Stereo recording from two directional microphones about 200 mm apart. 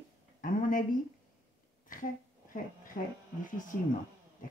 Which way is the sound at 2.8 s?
40° left (ahead or behind).